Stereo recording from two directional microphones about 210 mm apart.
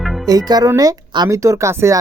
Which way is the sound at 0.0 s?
Centre (ahead or behind).